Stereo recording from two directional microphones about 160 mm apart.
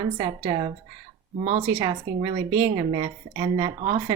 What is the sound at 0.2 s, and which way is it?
Speech, 30° right (ahead or behind).